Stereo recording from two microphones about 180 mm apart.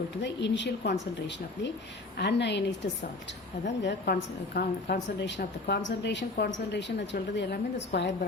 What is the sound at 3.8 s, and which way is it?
A woman's voice, 60° left (ahead or behind).